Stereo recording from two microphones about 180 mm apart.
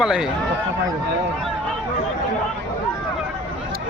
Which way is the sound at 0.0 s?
5° right (ahead or behind).